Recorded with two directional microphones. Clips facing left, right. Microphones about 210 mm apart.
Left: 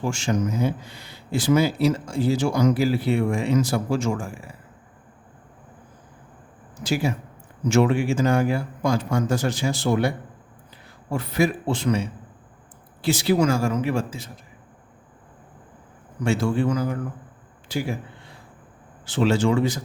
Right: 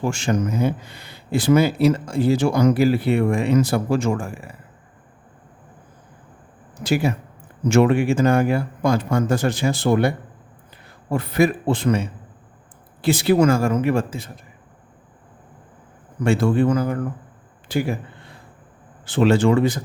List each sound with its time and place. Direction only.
0.0 s speech: 60° right (ahead or behind)
6.8 s speech: 55° right (ahead or behind)
16.2 s speech: 55° right (ahead or behind)
19.0 s speech: 55° right (ahead or behind)